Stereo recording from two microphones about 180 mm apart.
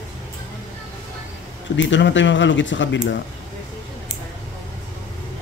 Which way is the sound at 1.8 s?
90° left.